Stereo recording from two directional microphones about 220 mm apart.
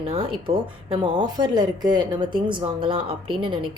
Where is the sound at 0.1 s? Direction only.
20° right (ahead or behind).